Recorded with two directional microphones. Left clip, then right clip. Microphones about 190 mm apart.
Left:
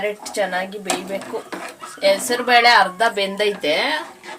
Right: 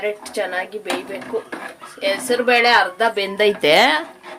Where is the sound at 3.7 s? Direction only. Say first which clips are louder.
Right 6 dB; 55° right (ahead or behind).